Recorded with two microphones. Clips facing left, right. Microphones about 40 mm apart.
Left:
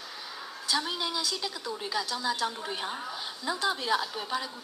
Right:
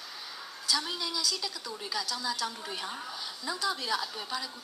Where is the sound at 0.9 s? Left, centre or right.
Left.